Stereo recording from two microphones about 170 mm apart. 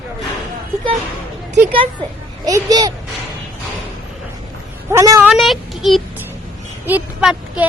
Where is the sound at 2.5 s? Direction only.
20° right (ahead or behind).